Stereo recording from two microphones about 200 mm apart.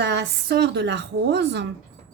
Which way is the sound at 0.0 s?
60° right (ahead or behind).